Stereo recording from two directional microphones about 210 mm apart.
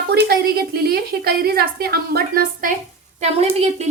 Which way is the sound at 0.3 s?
50° right (ahead or behind).